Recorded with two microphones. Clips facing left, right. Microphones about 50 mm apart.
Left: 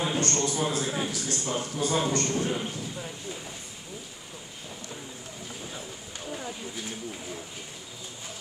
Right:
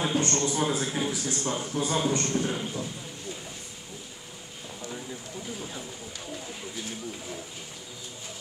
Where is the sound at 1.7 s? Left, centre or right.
Centre.